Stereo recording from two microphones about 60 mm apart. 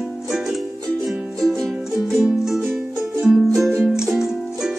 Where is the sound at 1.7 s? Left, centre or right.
Centre.